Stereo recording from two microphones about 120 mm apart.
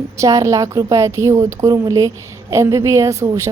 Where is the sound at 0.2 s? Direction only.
25° right (ahead or behind).